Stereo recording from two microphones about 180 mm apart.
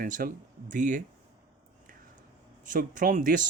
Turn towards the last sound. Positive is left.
turn(degrees=-45)  # may be behind; listen again after turning